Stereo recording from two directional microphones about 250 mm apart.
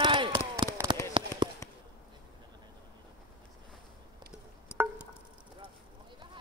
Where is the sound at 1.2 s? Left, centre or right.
Centre.